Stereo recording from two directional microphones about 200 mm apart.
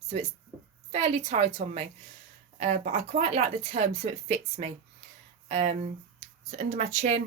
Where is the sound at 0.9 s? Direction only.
35° right (ahead or behind).